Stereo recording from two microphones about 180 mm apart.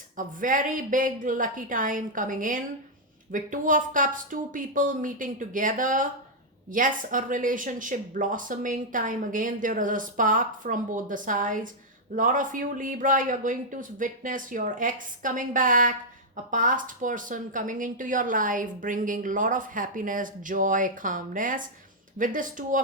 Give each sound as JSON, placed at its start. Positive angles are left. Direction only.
{"t": 0.2, "sound": "speech", "side_deg": -50}